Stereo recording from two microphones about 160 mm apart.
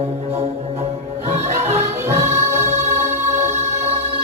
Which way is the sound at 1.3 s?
40° right (ahead or behind).